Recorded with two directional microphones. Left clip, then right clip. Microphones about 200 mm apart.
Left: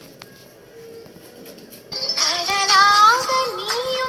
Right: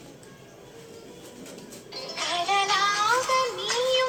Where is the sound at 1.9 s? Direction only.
55° left (ahead or behind).